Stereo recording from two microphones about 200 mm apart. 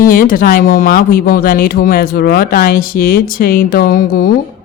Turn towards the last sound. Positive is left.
turn(degrees=45)  # may be behind; listen again after turning